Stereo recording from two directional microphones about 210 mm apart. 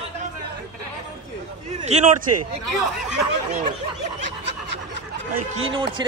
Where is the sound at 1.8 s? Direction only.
30° right (ahead or behind).